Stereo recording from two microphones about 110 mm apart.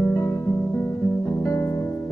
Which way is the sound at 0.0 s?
25° left (ahead or behind).